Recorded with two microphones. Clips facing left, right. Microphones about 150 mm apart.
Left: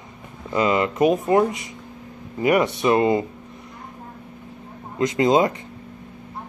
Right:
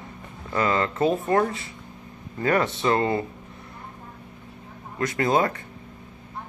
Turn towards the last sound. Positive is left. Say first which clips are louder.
# left 5 dB
turn(degrees=20)  # may be behind; listen again after turning